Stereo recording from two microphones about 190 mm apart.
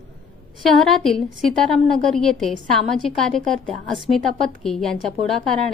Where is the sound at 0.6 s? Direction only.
Centre (ahead or behind).